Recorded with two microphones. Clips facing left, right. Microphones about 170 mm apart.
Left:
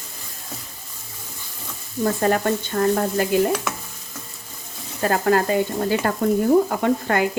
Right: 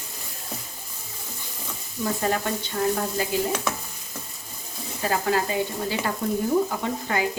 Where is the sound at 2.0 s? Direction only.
50° left (ahead or behind).